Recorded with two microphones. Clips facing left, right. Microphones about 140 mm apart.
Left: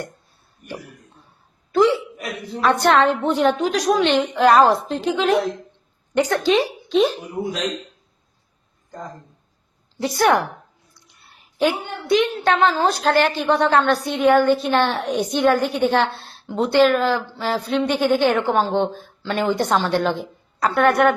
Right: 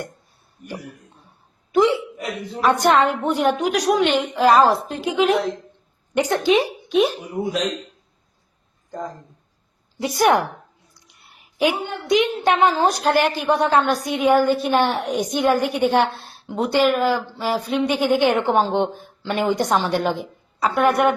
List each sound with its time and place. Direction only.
0.6 s speech: 20° right (ahead or behind)
2.6 s a woman's voice: 10° right (ahead or behind)
10.0 s a woman's voice: 15° right (ahead or behind)
10.9 s a sound: 10° right (ahead or behind)
11.7 s a woman's voice: 15° right (ahead or behind)
18.3 s a woman's voice: 20° right (ahead or behind); by 21.2 s centre (ahead or behind)